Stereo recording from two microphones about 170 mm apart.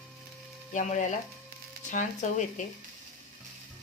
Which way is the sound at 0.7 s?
45° left (ahead or behind).